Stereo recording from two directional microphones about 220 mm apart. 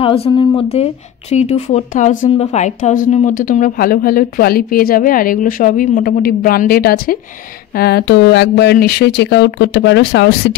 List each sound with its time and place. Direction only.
0.0 s speech: 25° left (ahead or behind); by 10.5 s 55° left (ahead or behind)